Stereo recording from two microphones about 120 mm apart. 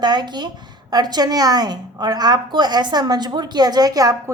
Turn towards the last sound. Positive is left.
turn(degrees=-30)  # may be behind; listen again after turning